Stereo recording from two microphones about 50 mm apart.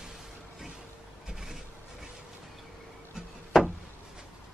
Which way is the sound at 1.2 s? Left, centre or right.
Centre.